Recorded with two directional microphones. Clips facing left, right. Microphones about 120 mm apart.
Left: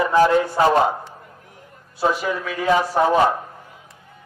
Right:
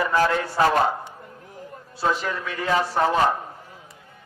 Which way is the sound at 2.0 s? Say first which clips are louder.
Left 3 dB; 10° left (ahead or behind).